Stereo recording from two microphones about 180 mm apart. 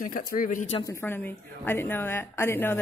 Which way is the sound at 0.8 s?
10° left (ahead or behind).